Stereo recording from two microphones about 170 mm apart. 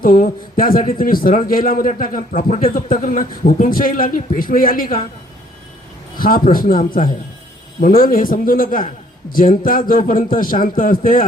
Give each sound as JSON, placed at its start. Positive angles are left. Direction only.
{"t": 0.0, "sound": "a man's voice", "side_deg": 55}
{"t": 6.1, "sound": "a man's voice", "side_deg": 55}